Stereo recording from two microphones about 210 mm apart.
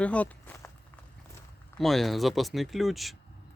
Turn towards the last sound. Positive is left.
turn(degrees=0)  # may be behind; listen again after turning